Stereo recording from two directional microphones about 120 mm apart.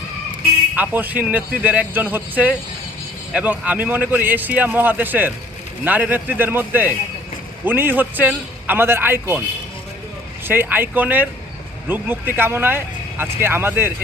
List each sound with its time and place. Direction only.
0.8 s speech: 15° right (ahead or behind)
10.4 s speech: 15° right (ahead or behind)